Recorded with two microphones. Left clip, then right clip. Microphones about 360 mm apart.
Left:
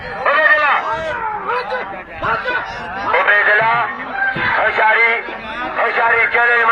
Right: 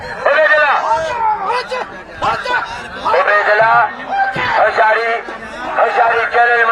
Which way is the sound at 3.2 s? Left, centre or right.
Right.